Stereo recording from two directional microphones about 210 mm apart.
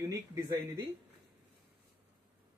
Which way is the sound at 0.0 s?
15° right (ahead or behind).